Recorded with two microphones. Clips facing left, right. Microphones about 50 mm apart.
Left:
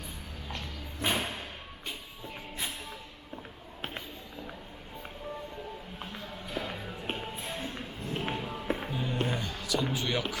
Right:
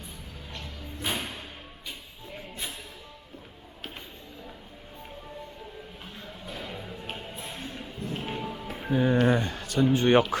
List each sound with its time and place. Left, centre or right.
1.0 s music: left
6.1 s music: left
8.9 s speech: right